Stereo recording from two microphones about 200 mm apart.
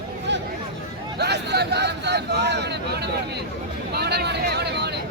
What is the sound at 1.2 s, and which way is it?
Speech, 55° right (ahead or behind).